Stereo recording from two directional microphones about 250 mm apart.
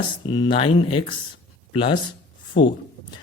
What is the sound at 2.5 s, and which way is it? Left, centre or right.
Speech, left.